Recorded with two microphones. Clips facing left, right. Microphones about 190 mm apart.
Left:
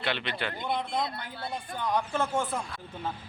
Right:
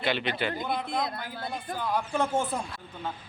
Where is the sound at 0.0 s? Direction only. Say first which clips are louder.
Right 4 dB; 5° right (ahead or behind).